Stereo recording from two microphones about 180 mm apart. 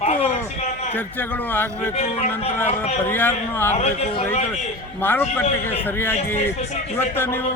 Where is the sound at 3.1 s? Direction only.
10° left (ahead or behind).